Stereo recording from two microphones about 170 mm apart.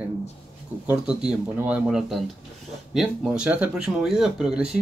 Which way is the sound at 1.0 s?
5° right (ahead or behind).